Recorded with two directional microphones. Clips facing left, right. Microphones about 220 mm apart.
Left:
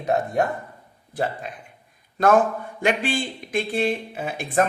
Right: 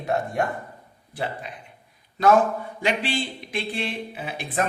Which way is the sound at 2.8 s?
50° left (ahead or behind).